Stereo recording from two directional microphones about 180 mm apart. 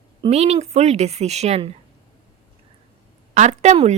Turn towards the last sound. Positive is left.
turn(degrees=-40)  # may be behind; listen again after turning